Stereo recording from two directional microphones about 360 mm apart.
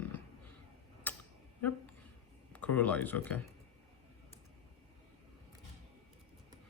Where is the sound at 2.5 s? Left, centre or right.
Centre.